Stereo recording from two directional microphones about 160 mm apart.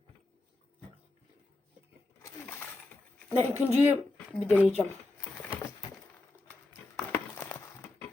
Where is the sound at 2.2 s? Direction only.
15° left (ahead or behind).